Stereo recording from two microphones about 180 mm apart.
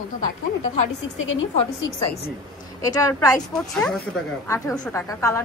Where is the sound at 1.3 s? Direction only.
90° left.